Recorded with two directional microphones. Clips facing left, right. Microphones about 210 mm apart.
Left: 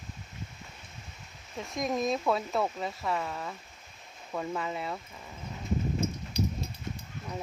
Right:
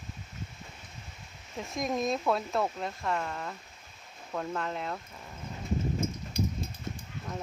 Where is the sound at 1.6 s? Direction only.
Centre (ahead or behind).